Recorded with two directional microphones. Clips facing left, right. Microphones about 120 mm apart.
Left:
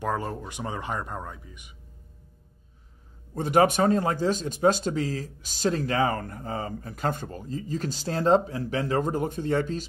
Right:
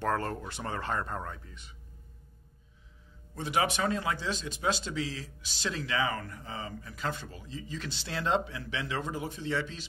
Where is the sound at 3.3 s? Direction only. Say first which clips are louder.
Left 9 dB; 45° left (ahead or behind).